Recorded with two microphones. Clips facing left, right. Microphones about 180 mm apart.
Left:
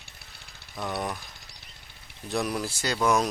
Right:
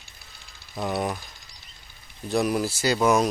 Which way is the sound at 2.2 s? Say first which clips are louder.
Right 5 dB; centre (ahead or behind).